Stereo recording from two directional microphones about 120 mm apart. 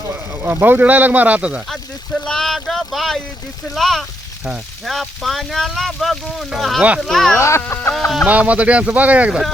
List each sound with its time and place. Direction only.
0.1 s speech: 15° right (ahead or behind)
1.7 s speech: 5° left (ahead or behind)
7.3 s speech: 25° left (ahead or behind)
7.9 s speech: centre (ahead or behind)
8.3 s speech: 10° right (ahead or behind)